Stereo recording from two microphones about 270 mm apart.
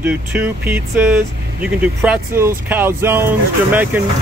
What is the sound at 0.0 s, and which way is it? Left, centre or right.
Speech, centre.